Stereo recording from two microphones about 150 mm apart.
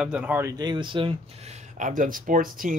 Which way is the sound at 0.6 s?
30° right (ahead or behind).